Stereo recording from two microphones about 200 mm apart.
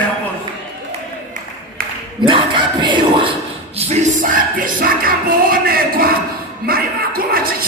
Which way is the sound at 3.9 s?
45° right (ahead or behind).